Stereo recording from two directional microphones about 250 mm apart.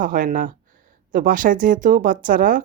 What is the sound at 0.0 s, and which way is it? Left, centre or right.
Speech, right.